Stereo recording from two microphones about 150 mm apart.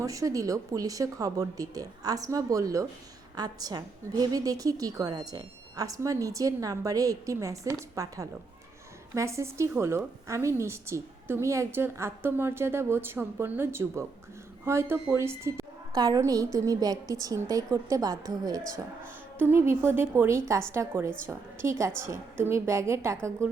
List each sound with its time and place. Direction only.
0.0 s a woman's voice: 20° right (ahead or behind)
19.4 s a woman's voice: 15° right (ahead or behind)